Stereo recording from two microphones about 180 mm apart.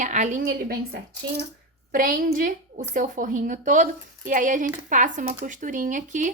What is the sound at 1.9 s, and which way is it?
A woman's voice, 50° right (ahead or behind).